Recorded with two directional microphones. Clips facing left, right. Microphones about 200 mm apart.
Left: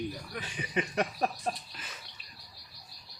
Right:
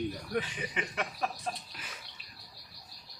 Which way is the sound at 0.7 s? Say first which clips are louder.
Left 6 dB; 40° left (ahead or behind).